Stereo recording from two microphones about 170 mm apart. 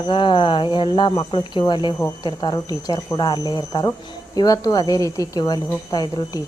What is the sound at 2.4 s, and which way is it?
Speech, 25° left (ahead or behind).